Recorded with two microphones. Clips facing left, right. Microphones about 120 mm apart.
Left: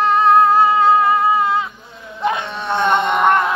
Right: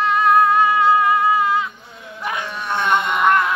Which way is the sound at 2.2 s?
25° left (ahead or behind).